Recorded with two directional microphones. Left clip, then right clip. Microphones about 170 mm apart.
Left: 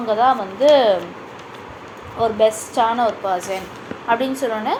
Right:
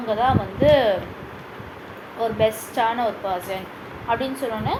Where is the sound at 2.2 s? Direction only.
40° left (ahead or behind).